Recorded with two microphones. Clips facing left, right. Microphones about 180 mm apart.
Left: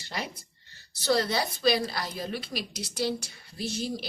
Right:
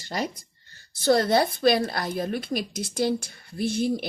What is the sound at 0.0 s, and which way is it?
A woman's voice, 40° right (ahead or behind).